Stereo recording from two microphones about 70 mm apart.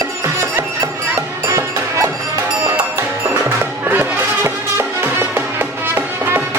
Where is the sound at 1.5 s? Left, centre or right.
Right.